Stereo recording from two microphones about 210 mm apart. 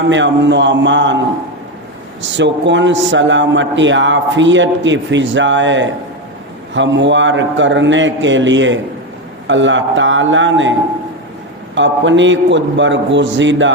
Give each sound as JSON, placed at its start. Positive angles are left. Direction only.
{"t": 0.1, "sound": "a man's voice", "side_deg": -60}
{"t": 2.3, "sound": "a man's voice", "side_deg": -60}